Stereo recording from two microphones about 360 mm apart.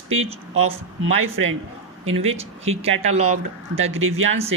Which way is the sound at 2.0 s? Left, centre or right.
Centre.